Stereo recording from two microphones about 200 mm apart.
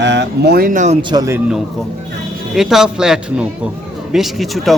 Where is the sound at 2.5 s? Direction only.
Centre (ahead or behind).